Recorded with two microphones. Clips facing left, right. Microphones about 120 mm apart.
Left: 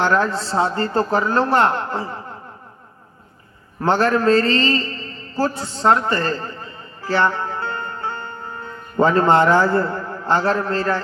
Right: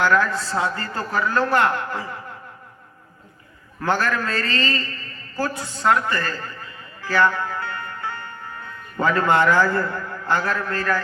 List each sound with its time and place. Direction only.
0.0 s a man's voice: 30° left (ahead or behind)
3.8 s a man's voice: 30° left (ahead or behind)